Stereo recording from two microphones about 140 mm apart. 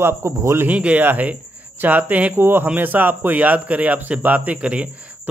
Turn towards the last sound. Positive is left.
turn(degrees=-10)  # may be behind; listen again after turning